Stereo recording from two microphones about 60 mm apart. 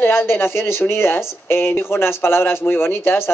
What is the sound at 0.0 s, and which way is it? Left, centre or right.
Speech, left.